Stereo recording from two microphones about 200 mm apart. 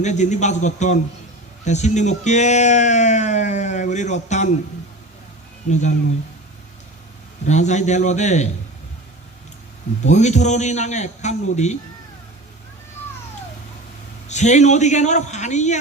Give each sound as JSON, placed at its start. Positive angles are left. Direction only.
{"t": 0.0, "sound": "speech", "side_deg": 35}
{"t": 7.4, "sound": "speech", "side_deg": 35}
{"t": 10.1, "sound": "speech", "side_deg": 35}
{"t": 14.3, "sound": "speech", "side_deg": 35}